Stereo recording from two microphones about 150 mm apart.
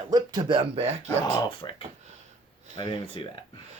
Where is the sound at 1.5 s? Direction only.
35° left (ahead or behind).